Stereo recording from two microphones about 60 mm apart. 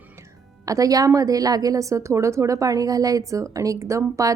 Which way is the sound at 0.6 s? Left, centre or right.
Right.